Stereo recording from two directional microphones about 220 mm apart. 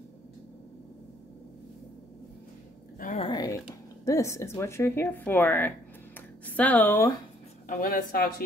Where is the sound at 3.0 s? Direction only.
35° left (ahead or behind).